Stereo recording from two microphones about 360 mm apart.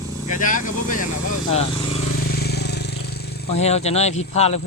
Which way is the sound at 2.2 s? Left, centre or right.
Left.